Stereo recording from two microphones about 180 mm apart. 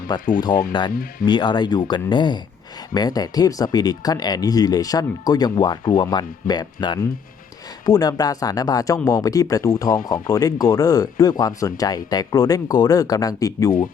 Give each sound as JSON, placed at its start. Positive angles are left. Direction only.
{"t": 0.1, "sound": "speech", "side_deg": 25}